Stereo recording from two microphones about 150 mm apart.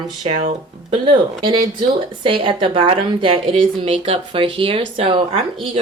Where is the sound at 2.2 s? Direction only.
35° right (ahead or behind).